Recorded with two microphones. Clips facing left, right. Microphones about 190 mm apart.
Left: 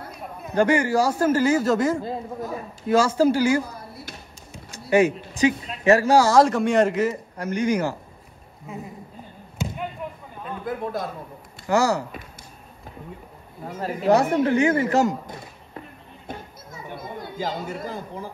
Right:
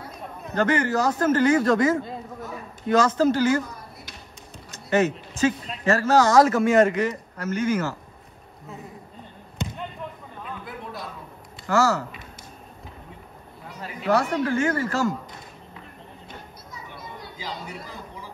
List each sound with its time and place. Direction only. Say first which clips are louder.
0.2 s a man's voice: left 3 dB; 10° left (ahead or behind)
4.6 s a man's voice: left 3 dB; 10° left (ahead or behind)
9.6 s basketball bounce: left 2 dB; centre (ahead or behind)
10.6 s a man's voice: left 8 dB; 45° left (ahead or behind)
11.6 s speech: left 1 dB; 15° left (ahead or behind)
13.7 s speech: left 5 dB; 45° left (ahead or behind)
14.4 s speech: left 4 dB; 20° left (ahead or behind)
16.3 s children playing: left 9 dB; 50° left (ahead or behind)